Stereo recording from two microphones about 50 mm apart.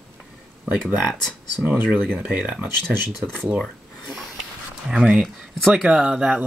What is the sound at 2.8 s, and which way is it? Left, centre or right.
Speech, centre.